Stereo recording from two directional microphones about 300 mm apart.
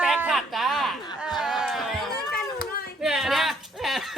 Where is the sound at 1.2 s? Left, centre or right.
Centre.